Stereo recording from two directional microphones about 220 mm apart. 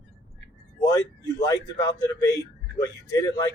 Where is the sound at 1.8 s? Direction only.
15° left (ahead or behind).